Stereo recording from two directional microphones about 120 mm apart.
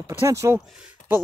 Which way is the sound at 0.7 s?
15° right (ahead or behind).